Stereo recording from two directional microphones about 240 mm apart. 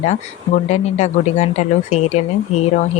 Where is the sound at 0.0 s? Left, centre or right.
Left.